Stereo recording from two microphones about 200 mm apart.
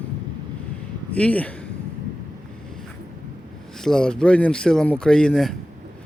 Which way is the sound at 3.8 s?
5° left (ahead or behind).